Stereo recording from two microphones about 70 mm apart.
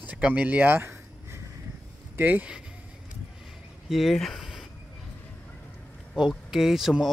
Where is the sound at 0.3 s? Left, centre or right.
Right.